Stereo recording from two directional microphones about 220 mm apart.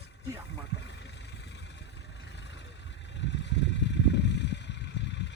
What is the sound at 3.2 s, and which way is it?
Vehicle, 55° left (ahead or behind).